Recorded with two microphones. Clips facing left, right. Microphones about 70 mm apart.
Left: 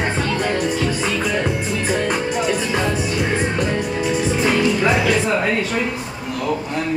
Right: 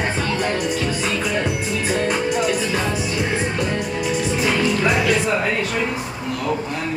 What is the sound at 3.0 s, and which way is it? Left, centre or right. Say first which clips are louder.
Music: left 2 dB; centre.